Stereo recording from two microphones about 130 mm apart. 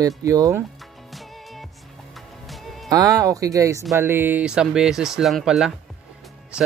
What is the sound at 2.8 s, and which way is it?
Speech, 30° right (ahead or behind).